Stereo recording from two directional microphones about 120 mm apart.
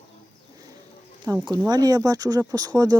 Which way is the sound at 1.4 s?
35° right (ahead or behind).